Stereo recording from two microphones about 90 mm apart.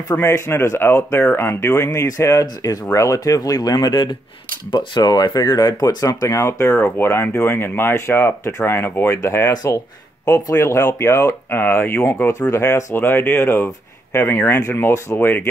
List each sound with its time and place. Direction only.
0.1 s speech: 30° left (ahead or behind)
9.5 s speech: 45° left (ahead or behind)
10.2 s speech: 35° left (ahead or behind)